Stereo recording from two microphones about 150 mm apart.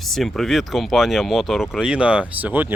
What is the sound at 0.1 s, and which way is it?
Speech, centre (ahead or behind).